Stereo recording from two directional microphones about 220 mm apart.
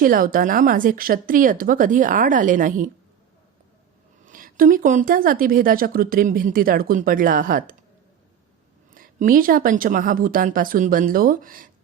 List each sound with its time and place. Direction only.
0.0 s speech: 40° right (ahead or behind)
4.3 s speech: 40° right (ahead or behind)
9.0 s speech: 40° right (ahead or behind)